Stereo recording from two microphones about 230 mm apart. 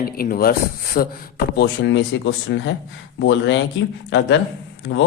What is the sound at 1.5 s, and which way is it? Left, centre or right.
A man's voice, left.